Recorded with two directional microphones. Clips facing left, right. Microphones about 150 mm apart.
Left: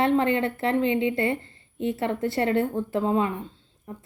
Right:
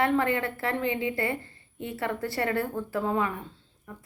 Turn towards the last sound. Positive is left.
turn(degrees=25)  # may be behind; listen again after turning